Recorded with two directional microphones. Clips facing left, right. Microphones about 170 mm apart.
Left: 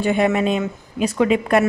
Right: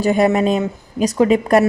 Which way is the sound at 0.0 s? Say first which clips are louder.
Right 3 dB; 40° right (ahead or behind).